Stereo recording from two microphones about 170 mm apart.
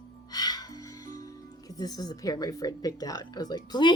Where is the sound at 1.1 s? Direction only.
20° left (ahead or behind).